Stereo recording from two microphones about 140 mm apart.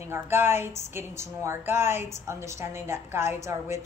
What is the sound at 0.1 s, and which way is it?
A woman's voice, 15° right (ahead or behind).